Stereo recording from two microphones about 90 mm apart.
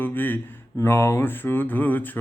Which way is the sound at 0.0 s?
20° left (ahead or behind).